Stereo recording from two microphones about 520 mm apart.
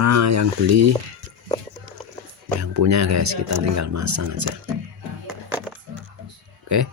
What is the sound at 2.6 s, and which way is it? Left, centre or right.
Speech, right.